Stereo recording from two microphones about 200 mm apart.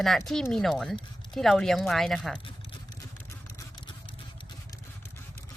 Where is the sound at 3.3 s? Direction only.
20° left (ahead or behind).